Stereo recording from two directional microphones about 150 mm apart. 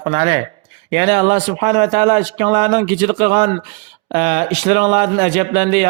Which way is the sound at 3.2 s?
35° right (ahead or behind).